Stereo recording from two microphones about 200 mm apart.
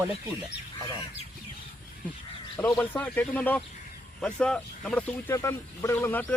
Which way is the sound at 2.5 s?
10° left (ahead or behind).